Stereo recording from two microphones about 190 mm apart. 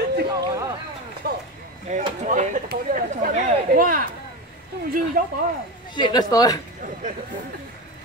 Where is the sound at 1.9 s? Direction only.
40° right (ahead or behind).